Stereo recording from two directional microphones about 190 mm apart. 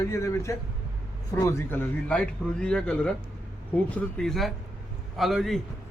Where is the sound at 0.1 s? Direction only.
15° left (ahead or behind).